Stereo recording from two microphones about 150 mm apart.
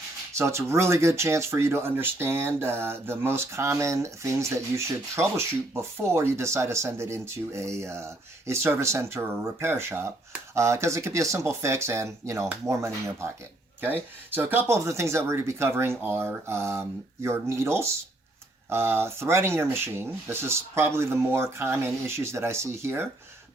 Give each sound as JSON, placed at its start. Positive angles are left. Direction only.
{"t": 0.3, "sound": "speech", "side_deg": -20}